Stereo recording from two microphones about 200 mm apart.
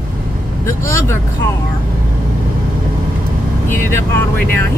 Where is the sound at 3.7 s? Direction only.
10° left (ahead or behind).